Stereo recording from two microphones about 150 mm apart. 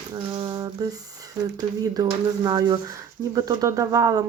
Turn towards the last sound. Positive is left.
turn(degrees=-25)  # may be behind; listen again after turning